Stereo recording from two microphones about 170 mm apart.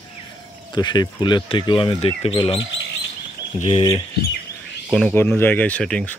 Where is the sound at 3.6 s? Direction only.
35° left (ahead or behind).